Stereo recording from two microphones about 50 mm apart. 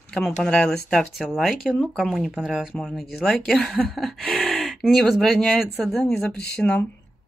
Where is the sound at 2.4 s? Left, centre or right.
Centre.